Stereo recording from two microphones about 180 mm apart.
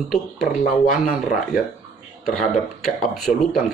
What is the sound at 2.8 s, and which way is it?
Speech, centre (ahead or behind).